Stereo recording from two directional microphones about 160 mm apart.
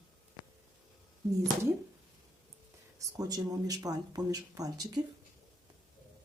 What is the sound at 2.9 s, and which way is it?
Speech, 20° right (ahead or behind).